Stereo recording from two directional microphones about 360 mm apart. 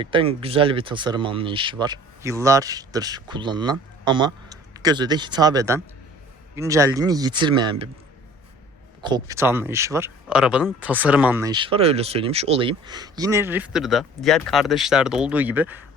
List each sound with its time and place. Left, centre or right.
0.0 s speech: centre
9.0 s speech: centre